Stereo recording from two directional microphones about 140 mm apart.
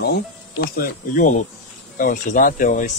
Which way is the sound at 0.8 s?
70° left (ahead or behind).